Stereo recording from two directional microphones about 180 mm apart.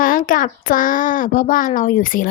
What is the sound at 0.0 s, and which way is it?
A child's voice, 50° left (ahead or behind).